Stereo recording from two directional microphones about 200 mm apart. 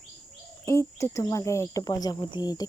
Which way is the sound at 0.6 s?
15° left (ahead or behind).